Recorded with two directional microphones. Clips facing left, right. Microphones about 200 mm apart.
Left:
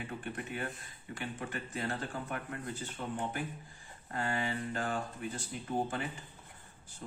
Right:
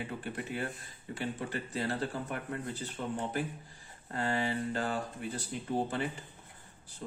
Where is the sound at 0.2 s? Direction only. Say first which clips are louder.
Right 2 dB; 35° right (ahead or behind).